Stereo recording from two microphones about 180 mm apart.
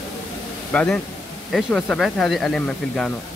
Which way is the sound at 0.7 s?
5° left (ahead or behind).